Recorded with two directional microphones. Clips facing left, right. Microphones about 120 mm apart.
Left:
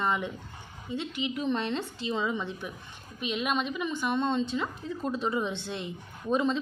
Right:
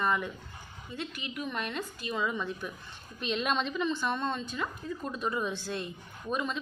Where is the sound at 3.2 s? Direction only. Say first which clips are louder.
Left 1 dB; 10° left (ahead or behind).